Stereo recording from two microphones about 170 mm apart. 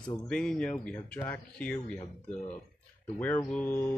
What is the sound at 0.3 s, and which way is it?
Speech, 5° left (ahead or behind).